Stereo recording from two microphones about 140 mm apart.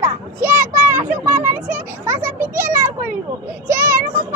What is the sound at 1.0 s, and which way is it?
Children playing, 65° right (ahead or behind).